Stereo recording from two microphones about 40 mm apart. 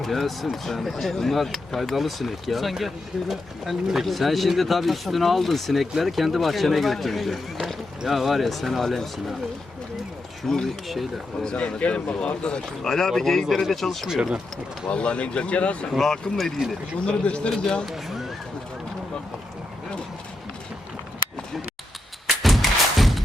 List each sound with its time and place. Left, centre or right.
0.0 s speech: centre
10.4 s speech: centre
11.4 s speech: left; by 14.1 s centre
14.8 s speech: left
16.0 s speech: centre
17.1 s speech: left
17.8 s speech: centre
22.4 s thump: centre